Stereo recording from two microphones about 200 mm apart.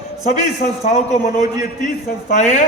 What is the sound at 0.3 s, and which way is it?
A man's voice, 35° left (ahead or behind).